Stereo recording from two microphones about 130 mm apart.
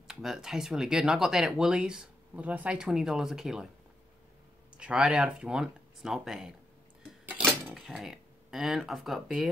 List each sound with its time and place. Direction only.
0.1 s speech: 5° right (ahead or behind)
4.7 s speech: 5° right (ahead or behind)
7.6 s speech: centre (ahead or behind)